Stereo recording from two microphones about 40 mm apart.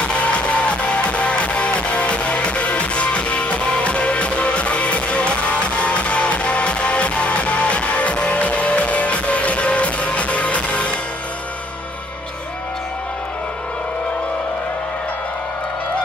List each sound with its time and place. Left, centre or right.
0.1 s music: left